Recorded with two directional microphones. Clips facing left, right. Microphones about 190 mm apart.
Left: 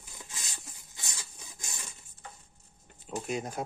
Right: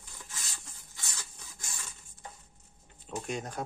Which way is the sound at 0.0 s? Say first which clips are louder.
Left 1 dB; 15° left (ahead or behind).